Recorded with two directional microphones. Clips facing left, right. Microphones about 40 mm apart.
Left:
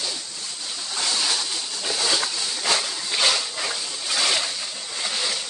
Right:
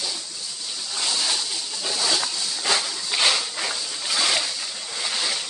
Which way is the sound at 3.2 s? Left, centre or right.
Centre.